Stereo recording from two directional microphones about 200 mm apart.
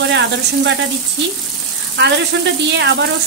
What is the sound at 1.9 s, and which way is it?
Speech, 60° right (ahead or behind).